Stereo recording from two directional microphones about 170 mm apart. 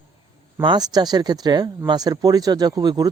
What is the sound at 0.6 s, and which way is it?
Speech, 25° right (ahead or behind).